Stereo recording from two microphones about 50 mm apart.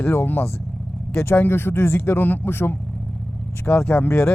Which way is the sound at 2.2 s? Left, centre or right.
Left.